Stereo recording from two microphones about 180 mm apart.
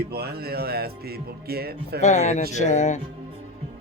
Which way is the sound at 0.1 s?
60° right (ahead or behind).